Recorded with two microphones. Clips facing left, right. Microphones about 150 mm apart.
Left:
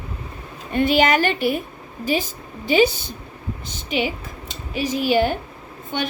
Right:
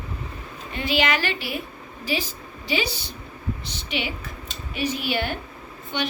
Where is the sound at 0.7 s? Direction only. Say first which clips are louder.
Left 7 dB; 50° left (ahead or behind).